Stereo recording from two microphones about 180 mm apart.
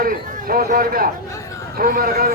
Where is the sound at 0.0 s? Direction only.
50° right (ahead or behind).